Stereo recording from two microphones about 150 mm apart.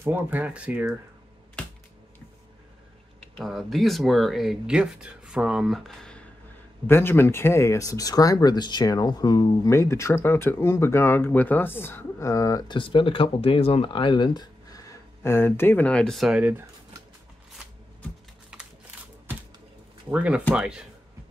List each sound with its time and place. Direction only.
0.0 s speech: 15° right (ahead or behind)
3.2 s speech: 5° left (ahead or behind)
6.9 s speech: 15° left (ahead or behind); by 16.6 s 10° right (ahead or behind)
20.1 s speech: 10° right (ahead or behind)